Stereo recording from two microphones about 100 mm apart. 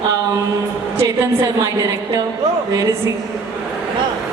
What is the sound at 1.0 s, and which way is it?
Speech, 30° right (ahead or behind).